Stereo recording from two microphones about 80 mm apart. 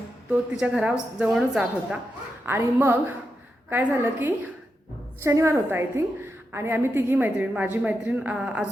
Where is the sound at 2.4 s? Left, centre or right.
Right.